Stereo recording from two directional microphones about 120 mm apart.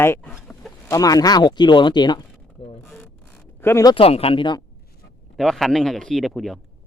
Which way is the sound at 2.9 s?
15° left (ahead or behind).